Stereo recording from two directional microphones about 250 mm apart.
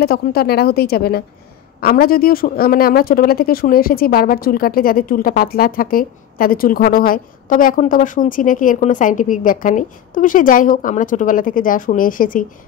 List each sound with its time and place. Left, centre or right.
0.0 s a man's voice: left